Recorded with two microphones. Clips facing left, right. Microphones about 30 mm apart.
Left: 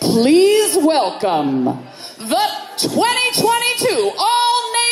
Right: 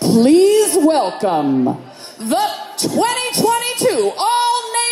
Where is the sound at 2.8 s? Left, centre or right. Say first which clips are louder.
Left 1 dB; left.